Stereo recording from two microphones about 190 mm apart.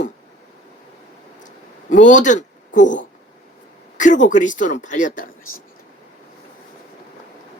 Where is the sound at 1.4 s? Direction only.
40° left (ahead or behind).